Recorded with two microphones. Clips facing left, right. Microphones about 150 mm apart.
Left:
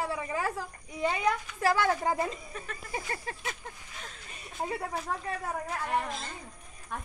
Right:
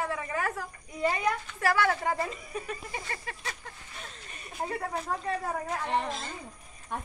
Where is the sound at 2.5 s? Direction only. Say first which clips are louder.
Right 6 dB; 10° right (ahead or behind).